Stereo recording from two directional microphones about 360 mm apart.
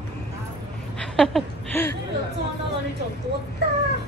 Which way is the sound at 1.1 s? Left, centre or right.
Centre.